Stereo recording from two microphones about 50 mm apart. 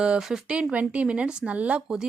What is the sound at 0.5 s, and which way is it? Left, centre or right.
Speech, right.